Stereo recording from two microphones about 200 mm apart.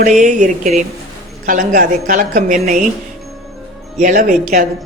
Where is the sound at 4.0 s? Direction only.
45° right (ahead or behind).